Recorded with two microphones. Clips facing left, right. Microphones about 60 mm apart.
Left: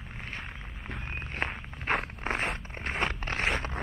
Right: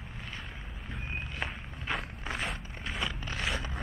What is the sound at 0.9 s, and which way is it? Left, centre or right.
Walk, left.